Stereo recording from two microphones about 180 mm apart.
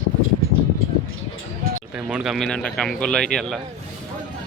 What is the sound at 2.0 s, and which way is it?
Speech, 5° right (ahead or behind).